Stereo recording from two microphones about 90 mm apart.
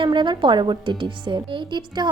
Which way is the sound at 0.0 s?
60° right (ahead or behind).